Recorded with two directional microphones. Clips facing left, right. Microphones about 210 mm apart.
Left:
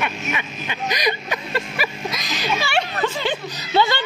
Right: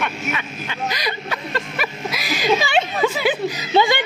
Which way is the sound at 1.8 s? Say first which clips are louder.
Even; 5° right (ahead or behind).